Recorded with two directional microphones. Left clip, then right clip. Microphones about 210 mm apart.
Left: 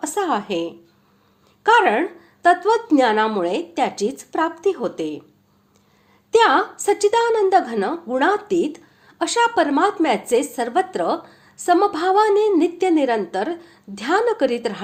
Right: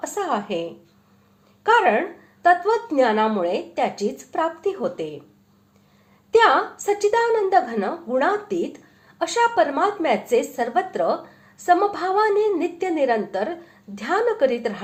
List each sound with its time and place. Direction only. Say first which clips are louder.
0.0 s a woman's voice: left 3 dB; 30° left (ahead or behind)
6.3 s a woman's voice: left 1 dB; 35° left (ahead or behind)